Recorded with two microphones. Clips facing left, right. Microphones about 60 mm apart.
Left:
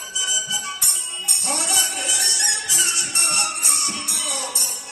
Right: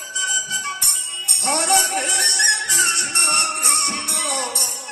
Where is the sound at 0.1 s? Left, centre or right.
Right.